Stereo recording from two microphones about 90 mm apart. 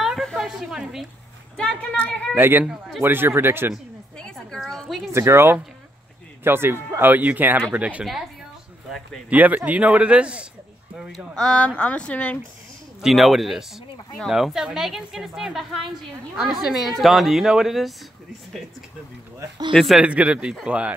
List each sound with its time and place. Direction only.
0.0 s a sound: centre (ahead or behind)
1.6 s speech: 10° left (ahead or behind)
2.3 s speech: 25° right (ahead or behind)
4.2 s a sound: 5° left (ahead or behind)
5.1 s speech: 30° right (ahead or behind)
9.3 s speech: 15° right (ahead or behind)
11.1 s speech: 10° left (ahead or behind)
13.0 s a woman's voice: centre (ahead or behind)
19.7 s a woman's voice: 5° left (ahead or behind)
20.0 s speech: 15° right (ahead or behind)